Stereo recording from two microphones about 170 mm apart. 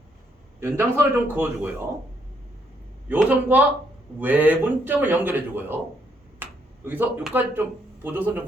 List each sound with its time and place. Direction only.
0.6 s a man's voice: 15° right (ahead or behind)
3.1 s a man's voice: 10° right (ahead or behind)